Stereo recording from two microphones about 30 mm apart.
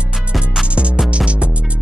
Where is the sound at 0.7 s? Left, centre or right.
Right.